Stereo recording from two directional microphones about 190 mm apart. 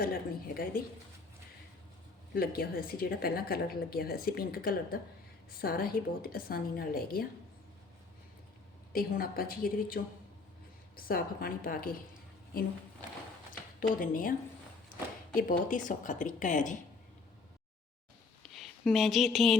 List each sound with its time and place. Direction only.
0.0 s speech: 50° left (ahead or behind)
2.3 s speech: 55° left (ahead or behind)
8.9 s speech: 50° left (ahead or behind)
13.5 s speech: 45° left (ahead or behind)
15.4 s speech: 45° left (ahead or behind)
18.5 s speech: centre (ahead or behind)